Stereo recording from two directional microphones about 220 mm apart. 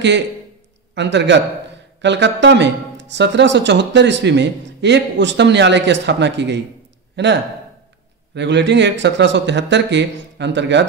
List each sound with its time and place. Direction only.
0.9 s speech: 55° right (ahead or behind)
8.4 s speech: 50° right (ahead or behind)